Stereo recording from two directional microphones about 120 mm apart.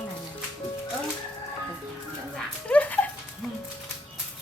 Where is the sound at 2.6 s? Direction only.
10° left (ahead or behind).